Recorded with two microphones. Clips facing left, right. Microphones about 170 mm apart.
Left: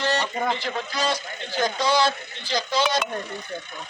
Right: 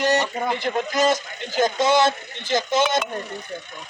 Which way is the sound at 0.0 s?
15° right (ahead or behind).